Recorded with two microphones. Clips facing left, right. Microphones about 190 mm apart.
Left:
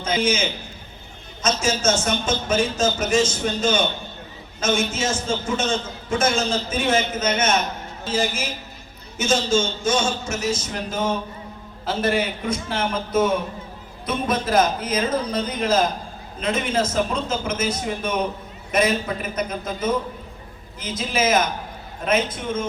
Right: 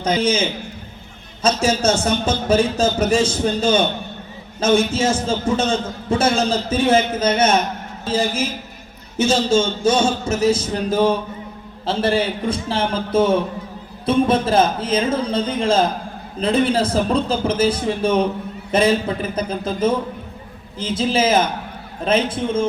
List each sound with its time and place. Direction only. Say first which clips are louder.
0.0 s a man's voice: right 4 dB; 35° right (ahead or behind)
1.6 s a man's voice: right 3 dB; 35° right (ahead or behind)
4.9 s a man's voice: right 5 dB; 30° right (ahead or behind)